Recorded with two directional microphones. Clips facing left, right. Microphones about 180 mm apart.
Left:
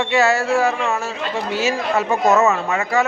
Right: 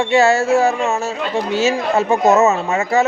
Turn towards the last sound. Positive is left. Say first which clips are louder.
# right 3 dB
turn(degrees=-25)  # may be behind; listen again after turning